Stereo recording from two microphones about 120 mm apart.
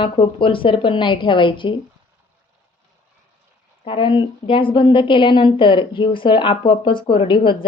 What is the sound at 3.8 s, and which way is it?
A woman's voice, 45° left (ahead or behind).